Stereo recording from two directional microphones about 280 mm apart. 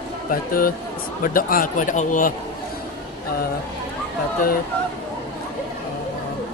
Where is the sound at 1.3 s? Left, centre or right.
Left.